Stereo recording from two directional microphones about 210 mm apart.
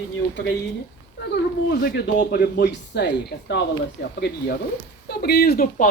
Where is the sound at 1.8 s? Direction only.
50° left (ahead or behind).